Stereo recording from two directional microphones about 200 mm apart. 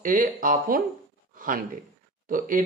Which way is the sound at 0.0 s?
40° right (ahead or behind).